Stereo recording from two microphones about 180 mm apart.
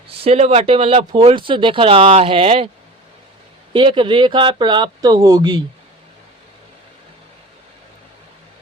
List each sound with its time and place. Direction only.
0.1 s speech: 35° right (ahead or behind)
3.7 s speech: 25° right (ahead or behind)